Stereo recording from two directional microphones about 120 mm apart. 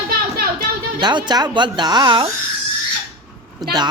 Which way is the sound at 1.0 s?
40° right (ahead or behind).